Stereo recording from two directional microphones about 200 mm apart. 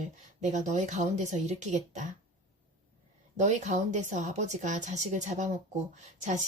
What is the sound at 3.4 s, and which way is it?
A woman's voice, 35° right (ahead or behind).